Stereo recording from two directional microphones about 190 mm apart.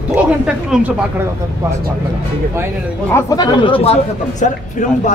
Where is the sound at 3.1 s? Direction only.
20° left (ahead or behind).